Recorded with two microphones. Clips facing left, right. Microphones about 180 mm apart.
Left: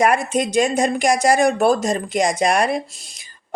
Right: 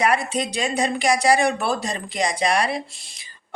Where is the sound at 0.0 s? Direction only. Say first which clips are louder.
Left 4 dB; 45° left (ahead or behind).